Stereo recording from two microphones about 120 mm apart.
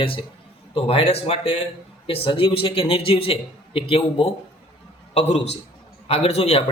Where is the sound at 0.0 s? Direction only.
45° left (ahead or behind).